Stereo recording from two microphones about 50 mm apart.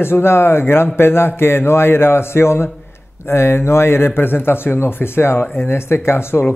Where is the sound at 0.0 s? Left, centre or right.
Left.